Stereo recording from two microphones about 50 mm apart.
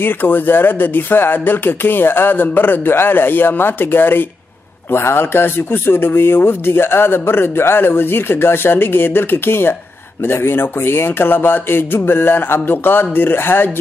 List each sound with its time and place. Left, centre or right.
0.0 s speech: left